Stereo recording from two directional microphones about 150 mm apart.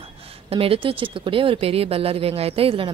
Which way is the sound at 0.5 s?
40° right (ahead or behind).